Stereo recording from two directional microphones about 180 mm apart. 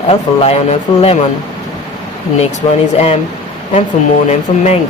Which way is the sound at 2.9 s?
35° left (ahead or behind).